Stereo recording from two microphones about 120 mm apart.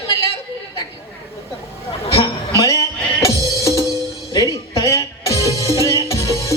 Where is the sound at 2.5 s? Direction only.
30° left (ahead or behind).